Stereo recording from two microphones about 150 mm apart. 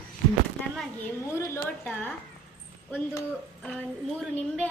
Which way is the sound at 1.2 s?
15° left (ahead or behind).